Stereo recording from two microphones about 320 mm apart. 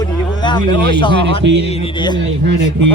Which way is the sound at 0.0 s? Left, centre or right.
Centre.